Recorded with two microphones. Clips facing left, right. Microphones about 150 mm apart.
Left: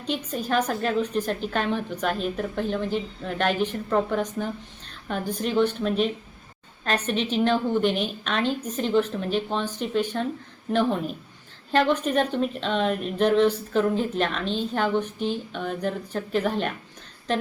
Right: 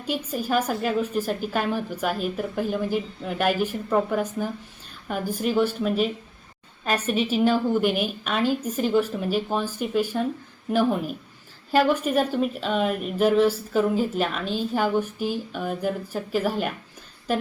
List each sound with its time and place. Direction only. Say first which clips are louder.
0.0 s speech: right 1 dB; 10° right (ahead or behind)